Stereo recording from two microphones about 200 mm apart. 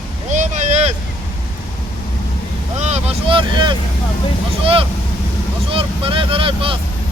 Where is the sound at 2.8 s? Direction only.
30° right (ahead or behind).